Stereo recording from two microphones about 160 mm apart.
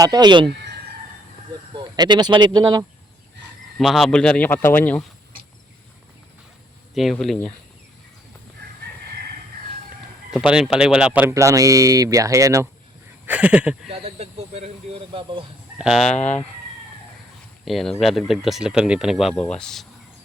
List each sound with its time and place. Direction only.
0.0 s speech: 25° right (ahead or behind)
1.7 s speech: 25° right (ahead or behind)
3.8 s speech: centre (ahead or behind)
6.9 s speech: centre (ahead or behind)
10.3 s speech: 5° right (ahead or behind)
13.2 s speech: 5° right (ahead or behind)
13.9 s speech: 40° right (ahead or behind)
15.8 s speech: centre (ahead or behind)
16.1 s speech: 45° left (ahead or behind)
17.7 s speech: centre (ahead or behind)